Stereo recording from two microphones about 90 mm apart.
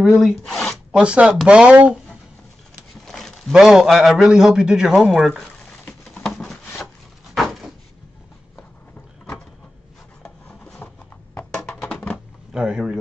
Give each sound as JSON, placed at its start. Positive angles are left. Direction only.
{"t": 0.2, "sound": "speech", "side_deg": 0}
{"t": 0.9, "sound": "speech", "side_deg": -10}
{"t": 3.1, "sound": "a man's voice", "side_deg": 5}
{"t": 5.7, "sound": "patter", "side_deg": 10}
{"t": 6.3, "sound": "rub", "side_deg": 5}
{"t": 10.8, "sound": "clip-clop", "side_deg": 20}
{"t": 11.5, "sound": "music", "side_deg": 10}
{"t": 12.5, "sound": "a sound", "side_deg": -10}